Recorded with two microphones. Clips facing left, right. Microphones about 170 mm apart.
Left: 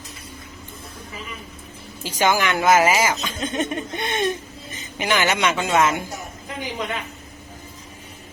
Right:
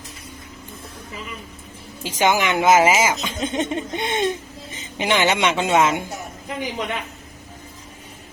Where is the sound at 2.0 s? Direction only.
20° right (ahead or behind).